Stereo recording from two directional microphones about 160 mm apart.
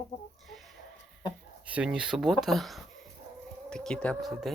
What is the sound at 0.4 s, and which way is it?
Chicken, centre (ahead or behind).